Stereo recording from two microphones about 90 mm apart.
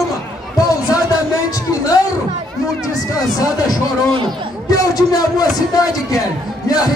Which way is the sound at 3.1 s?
40° left (ahead or behind).